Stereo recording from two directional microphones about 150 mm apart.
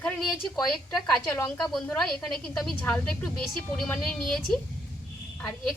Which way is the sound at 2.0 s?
5° left (ahead or behind).